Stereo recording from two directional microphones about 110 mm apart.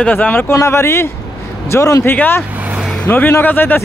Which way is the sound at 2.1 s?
15° left (ahead or behind).